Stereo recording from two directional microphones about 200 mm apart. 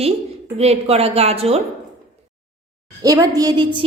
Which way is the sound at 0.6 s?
30° right (ahead or behind).